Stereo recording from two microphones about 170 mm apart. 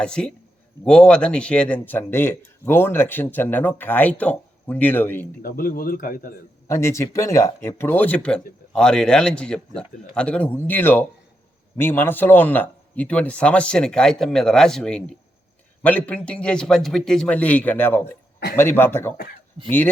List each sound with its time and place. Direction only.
0.0 s a man's voice: 5° left (ahead or behind)
5.4 s speech: 55° left (ahead or behind)
6.7 s a man's voice: 15° left (ahead or behind)
19.1 s speech: 65° left (ahead or behind)